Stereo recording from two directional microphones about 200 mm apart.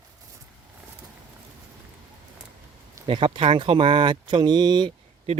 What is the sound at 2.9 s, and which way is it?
Speech, 25° right (ahead or behind).